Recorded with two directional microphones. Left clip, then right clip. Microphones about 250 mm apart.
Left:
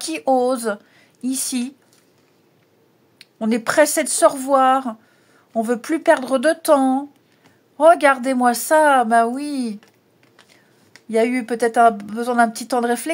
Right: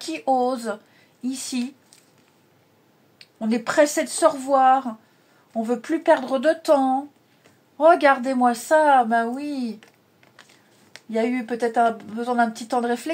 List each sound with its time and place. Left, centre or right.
0.0 s speech: left
3.2 s a woman's voice: left
11.1 s a woman's voice: left